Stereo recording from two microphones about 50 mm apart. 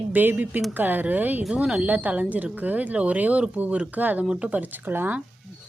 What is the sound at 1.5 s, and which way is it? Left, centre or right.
Speech, centre.